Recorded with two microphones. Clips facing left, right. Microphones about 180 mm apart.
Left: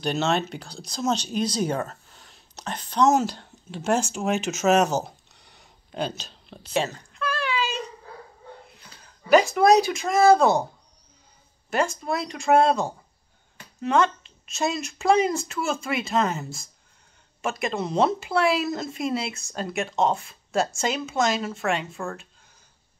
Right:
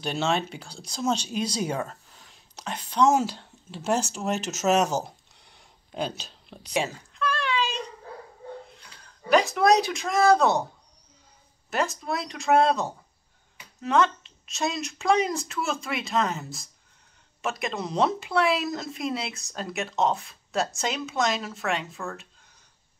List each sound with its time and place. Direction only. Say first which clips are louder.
0.0 s speech: left 2 dB; centre (ahead or behind)
0.8 s speech: left 1 dB; 10° right (ahead or behind)
1.1 s speech: left 2 dB; 35° left (ahead or behind)
1.5 s speech: left 3 dB; 10° right (ahead or behind)
4.1 s speech: left 3 dB; 10° left (ahead or behind)
5.0 s a sound: left 1 dB; 5° left (ahead or behind)
7.2 s a sound: even; 5° left (ahead or behind)
8.7 s speech: left 1 dB; 5° left (ahead or behind)
11.7 s speech: left 3 dB; centre (ahead or behind)